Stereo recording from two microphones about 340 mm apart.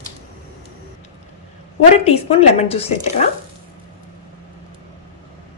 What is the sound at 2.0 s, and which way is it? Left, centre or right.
Speech, centre.